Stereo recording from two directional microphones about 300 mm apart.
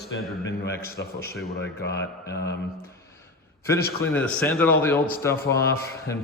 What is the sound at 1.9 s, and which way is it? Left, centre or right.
Speech, centre.